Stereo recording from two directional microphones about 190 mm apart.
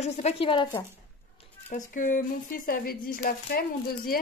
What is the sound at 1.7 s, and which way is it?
Speech, 40° left (ahead or behind).